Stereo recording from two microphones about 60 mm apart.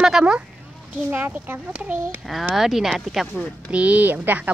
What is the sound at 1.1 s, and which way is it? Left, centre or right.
Speech, right.